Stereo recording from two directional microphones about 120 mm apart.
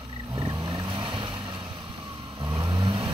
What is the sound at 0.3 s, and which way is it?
Boat, 45° right (ahead or behind).